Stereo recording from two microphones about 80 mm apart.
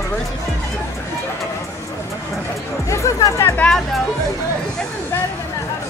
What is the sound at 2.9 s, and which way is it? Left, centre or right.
Speech, left.